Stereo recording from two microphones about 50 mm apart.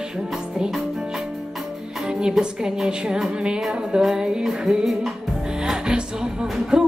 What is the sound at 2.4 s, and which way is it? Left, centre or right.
A woman's voice, centre.